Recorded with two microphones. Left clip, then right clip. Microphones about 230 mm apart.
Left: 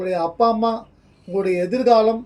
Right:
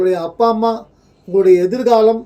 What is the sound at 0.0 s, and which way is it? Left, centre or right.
Speech, right.